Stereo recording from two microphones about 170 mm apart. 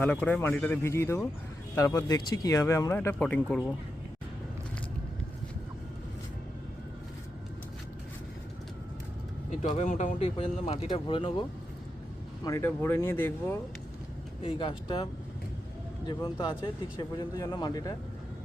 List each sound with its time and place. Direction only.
0.0 s speech: 10° left (ahead or behind)
9.6 s speech: 45° left (ahead or behind)
10.2 s speech: 35° left (ahead or behind)
12.5 s speech: 15° left (ahead or behind)
14.4 s speech: 30° left (ahead or behind)